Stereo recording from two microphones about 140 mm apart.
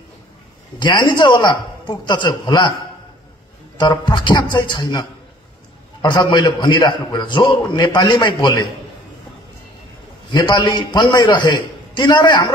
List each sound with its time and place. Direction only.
0.7 s a man's voice: 35° left (ahead or behind)
3.7 s a man's voice: 30° left (ahead or behind)
6.0 s a man's voice: 30° left (ahead or behind)
10.3 s a man's voice: 30° left (ahead or behind)